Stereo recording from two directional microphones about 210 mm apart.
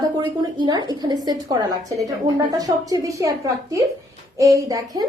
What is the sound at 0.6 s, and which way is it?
A woman's voice, 20° right (ahead or behind).